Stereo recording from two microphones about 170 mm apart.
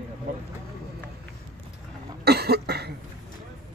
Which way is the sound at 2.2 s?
70° right (ahead or behind).